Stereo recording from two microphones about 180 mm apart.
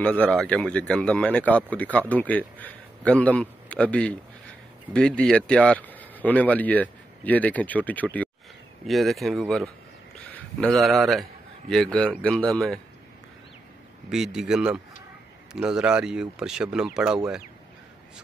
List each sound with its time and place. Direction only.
0.0 s speech: 5° left (ahead or behind)
14.1 s speech: 5° right (ahead or behind)